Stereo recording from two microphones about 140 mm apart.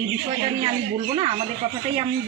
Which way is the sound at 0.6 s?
45° right (ahead or behind).